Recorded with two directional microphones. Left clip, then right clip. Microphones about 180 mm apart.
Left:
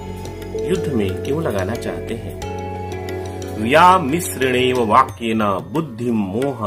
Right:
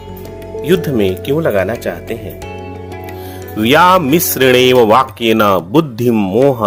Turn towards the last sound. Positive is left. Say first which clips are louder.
# right 9 dB
turn(degrees=-45)  # may be behind; listen again after turning